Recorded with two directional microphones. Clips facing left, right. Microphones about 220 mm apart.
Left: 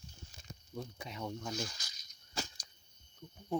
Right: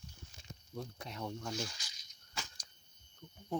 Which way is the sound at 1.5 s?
40° left (ahead or behind).